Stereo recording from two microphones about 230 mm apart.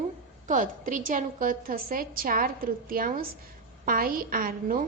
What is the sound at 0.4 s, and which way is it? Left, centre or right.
A woman's voice, right.